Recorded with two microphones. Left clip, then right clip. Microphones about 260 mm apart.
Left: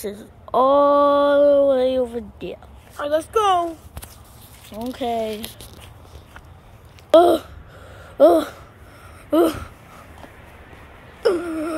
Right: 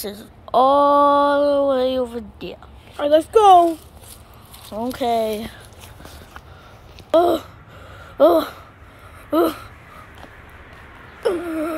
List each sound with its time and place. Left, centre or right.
0.0 s speech: centre
3.0 s speech: right
4.7 s speech: centre
7.1 s a sound: centre
9.3 s speech: centre
11.2 s speech: centre